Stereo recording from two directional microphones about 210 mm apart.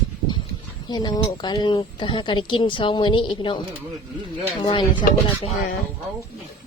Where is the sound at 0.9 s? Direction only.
20° left (ahead or behind).